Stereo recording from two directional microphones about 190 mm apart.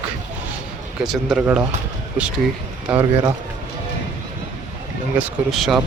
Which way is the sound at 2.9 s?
5° right (ahead or behind).